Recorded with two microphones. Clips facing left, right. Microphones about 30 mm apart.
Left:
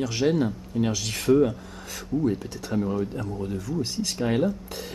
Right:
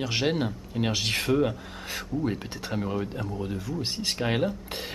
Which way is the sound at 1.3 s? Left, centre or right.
Right.